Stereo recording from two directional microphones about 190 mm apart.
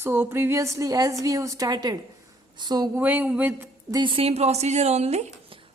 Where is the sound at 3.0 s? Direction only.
10° right (ahead or behind).